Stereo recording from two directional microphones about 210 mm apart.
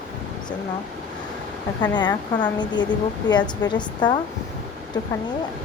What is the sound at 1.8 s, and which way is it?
A woman's voice, 20° left (ahead or behind).